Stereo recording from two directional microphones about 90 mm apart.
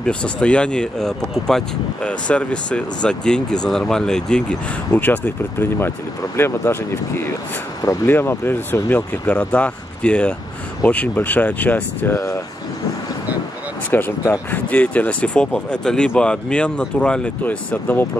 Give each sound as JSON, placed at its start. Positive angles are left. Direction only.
{"t": 0.0, "sound": "speech", "side_deg": 10}
{"t": 4.9, "sound": "speech", "side_deg": 20}
{"t": 8.1, "sound": "speech", "side_deg": 25}
{"t": 13.9, "sound": "speech", "side_deg": 20}